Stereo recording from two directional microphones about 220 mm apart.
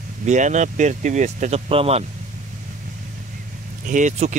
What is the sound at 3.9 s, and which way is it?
Speech, 35° right (ahead or behind).